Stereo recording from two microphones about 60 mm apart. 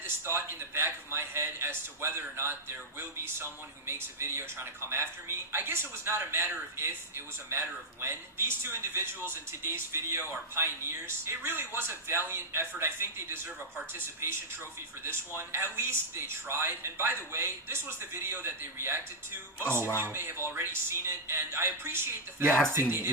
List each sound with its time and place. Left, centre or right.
0.0 s a man's voice: right